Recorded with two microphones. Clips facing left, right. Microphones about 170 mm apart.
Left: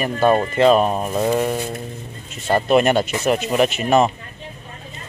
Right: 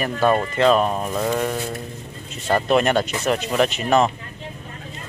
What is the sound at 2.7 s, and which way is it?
Speech, 5° left (ahead or behind).